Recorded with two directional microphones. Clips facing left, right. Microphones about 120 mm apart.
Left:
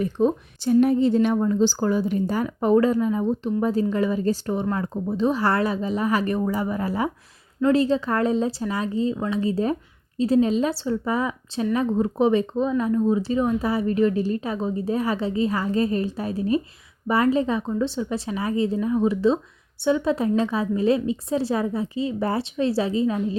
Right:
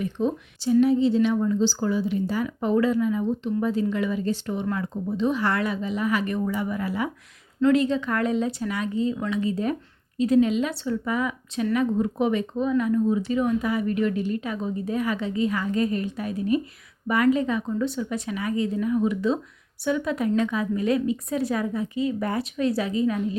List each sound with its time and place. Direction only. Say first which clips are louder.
0.0 s a woman's voice: left 4 dB; 45° left (ahead or behind)